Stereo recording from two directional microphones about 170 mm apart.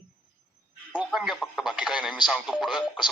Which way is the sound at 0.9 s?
5° right (ahead or behind).